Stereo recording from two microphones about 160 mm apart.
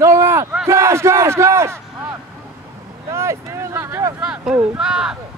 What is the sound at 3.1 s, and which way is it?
Speech, 15° right (ahead or behind).